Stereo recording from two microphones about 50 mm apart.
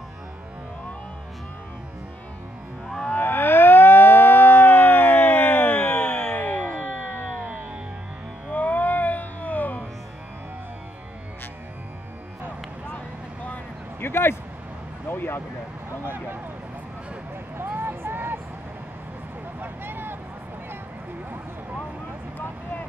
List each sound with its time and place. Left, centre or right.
3.2 s civil defense siren: left
6.3 s music: left
8.5 s music: left
14.0 s a sound: left
17.6 s vehicle: right
19.6 s vehicle: right